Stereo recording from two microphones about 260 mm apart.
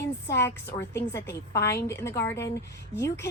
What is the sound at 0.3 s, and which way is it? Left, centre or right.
A woman's voice, centre.